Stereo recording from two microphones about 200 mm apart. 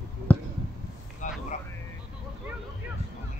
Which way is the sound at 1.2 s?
40° left (ahead or behind).